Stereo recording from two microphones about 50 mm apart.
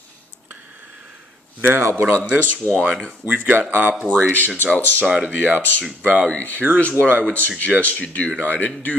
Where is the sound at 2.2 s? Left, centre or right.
Right.